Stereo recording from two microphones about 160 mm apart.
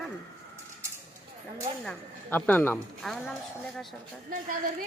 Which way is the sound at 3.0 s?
Centre (ahead or behind).